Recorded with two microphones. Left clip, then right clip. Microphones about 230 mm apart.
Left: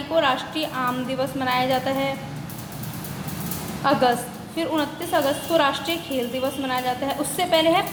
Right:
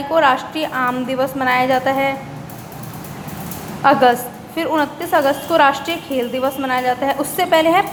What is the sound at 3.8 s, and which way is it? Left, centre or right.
A woman's voice, right.